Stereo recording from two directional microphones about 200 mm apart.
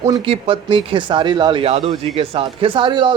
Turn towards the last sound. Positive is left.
turn(degrees=-25)  # may be behind; listen again after turning